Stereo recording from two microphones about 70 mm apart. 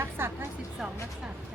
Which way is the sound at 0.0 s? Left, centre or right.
Right.